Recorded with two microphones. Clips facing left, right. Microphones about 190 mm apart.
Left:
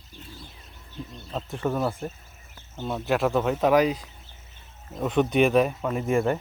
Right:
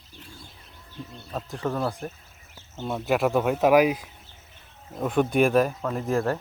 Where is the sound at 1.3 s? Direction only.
5° right (ahead or behind).